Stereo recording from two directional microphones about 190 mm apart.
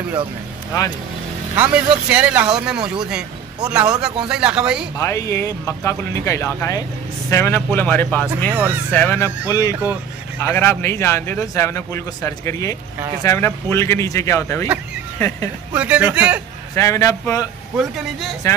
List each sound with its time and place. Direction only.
1.5 s speech: 10° right (ahead or behind)
4.9 s a man's voice: 15° left (ahead or behind)
15.7 s speech: 5° right (ahead or behind)
16.7 s a man's voice: 15° left (ahead or behind)
17.7 s speech: centre (ahead or behind)